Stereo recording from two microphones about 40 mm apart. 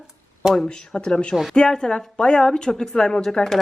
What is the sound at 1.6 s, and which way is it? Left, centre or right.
Speech, centre.